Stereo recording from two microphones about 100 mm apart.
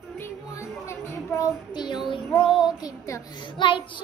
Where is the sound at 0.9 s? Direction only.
25° left (ahead or behind).